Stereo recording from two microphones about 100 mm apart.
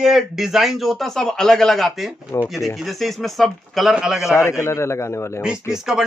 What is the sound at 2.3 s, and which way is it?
Speech, 30° left (ahead or behind).